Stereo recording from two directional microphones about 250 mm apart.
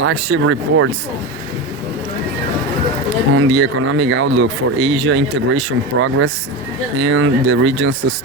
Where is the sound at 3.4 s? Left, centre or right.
Right.